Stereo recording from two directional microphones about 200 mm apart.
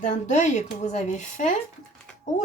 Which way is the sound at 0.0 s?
35° left (ahead or behind).